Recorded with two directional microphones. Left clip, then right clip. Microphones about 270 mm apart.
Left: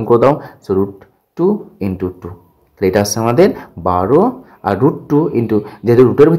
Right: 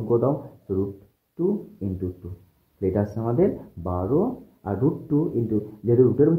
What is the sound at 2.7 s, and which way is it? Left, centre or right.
Speech, left.